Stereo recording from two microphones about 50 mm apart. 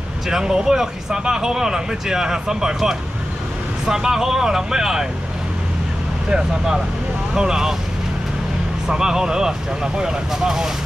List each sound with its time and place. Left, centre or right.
0.3 s speech: centre
7.3 s speech: centre
8.8 s speech: centre